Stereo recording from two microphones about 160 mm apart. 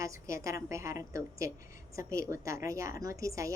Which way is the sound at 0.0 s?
20° right (ahead or behind).